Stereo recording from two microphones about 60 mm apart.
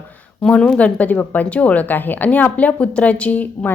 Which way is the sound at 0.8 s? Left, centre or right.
Left.